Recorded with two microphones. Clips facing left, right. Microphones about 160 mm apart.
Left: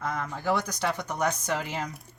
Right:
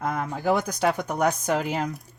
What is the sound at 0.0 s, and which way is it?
Speech, 55° right (ahead or behind).